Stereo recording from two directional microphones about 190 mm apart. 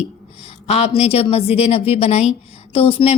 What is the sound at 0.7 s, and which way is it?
A woman's voice, 35° left (ahead or behind).